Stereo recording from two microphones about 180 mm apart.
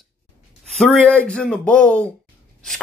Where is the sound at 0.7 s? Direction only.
5° left (ahead or behind).